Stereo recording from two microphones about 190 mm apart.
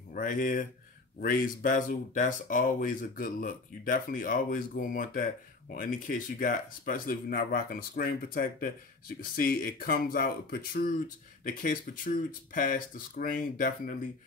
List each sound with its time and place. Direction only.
0.1 s speech: 45° left (ahead or behind)